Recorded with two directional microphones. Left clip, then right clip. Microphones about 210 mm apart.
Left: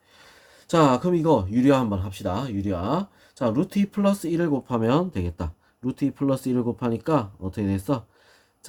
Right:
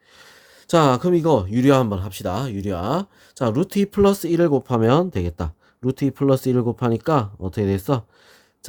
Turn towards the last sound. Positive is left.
turn(degrees=-45)  # may be behind; listen again after turning